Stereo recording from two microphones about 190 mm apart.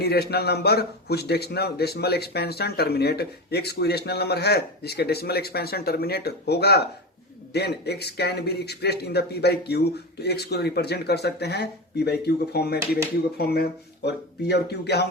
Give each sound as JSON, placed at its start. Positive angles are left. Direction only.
{"t": 0.0, "sound": "a man's voice", "side_deg": 55}